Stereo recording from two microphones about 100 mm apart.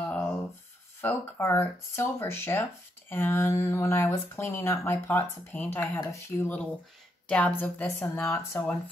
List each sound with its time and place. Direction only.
0.1 s rub: 10° left (ahead or behind)
1.0 s speech: 25° left (ahead or behind)
7.2 s speech: 15° left (ahead or behind)